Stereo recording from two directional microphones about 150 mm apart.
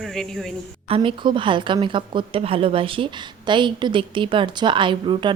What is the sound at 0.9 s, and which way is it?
A woman's voice, 35° right (ahead or behind).